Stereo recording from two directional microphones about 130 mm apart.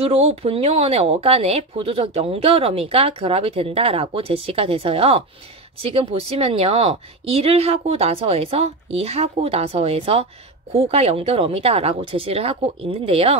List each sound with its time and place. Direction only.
0.0 s speech: 50° right (ahead or behind)